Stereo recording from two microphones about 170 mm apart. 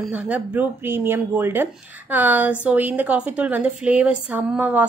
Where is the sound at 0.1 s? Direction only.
10° right (ahead or behind).